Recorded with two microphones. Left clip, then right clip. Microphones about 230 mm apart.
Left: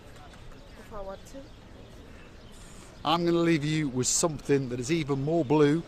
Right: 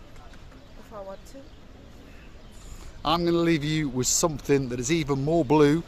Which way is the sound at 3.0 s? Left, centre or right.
Centre.